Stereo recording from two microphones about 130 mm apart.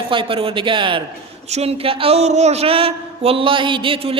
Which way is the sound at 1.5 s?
50° right (ahead or behind).